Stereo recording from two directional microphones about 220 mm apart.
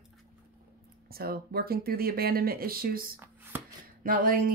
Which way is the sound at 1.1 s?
45° right (ahead or behind).